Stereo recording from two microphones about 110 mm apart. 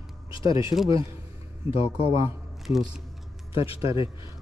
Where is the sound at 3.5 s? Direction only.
55° left (ahead or behind).